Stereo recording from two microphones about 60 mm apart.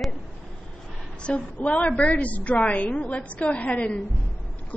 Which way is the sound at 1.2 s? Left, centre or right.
Centre.